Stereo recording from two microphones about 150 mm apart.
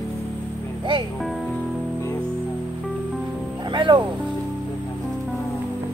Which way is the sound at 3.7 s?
30° right (ahead or behind).